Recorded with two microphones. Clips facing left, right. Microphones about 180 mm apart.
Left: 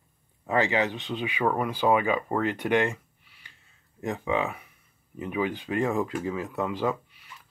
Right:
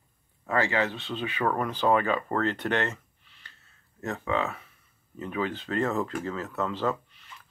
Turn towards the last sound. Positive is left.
turn(degrees=10)  # may be behind; listen again after turning